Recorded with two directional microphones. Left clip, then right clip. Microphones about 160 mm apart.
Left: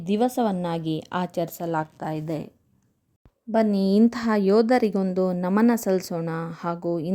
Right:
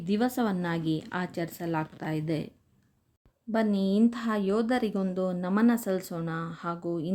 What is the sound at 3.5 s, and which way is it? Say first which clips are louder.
A woman's voice: left 6 dB; 30° left (ahead or behind).